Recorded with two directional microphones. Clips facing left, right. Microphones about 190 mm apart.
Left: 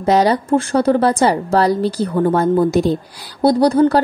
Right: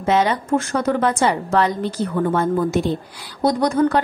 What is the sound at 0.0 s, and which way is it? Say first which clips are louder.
Speech: left 4 dB; 35° left (ahead or behind).